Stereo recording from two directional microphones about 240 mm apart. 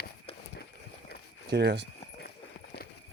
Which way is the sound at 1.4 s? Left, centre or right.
Right.